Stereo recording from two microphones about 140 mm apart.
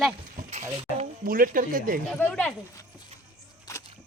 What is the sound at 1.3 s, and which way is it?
Speech, 90° right.